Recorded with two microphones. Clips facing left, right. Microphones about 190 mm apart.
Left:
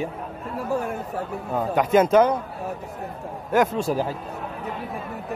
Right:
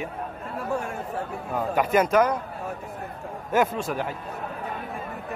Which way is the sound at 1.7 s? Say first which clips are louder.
Left 4 dB; 25° left (ahead or behind).